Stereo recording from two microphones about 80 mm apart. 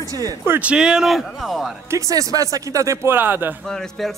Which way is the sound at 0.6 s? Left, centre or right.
Centre.